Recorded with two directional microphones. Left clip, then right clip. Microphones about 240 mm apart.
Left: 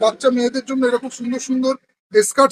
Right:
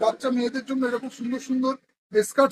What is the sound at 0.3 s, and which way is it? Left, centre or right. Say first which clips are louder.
Speech: left 7 dB; left.